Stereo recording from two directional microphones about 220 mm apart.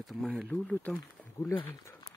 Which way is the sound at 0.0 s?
Centre (ahead or behind).